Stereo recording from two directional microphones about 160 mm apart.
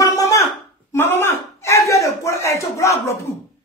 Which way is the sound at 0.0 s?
20° left (ahead or behind).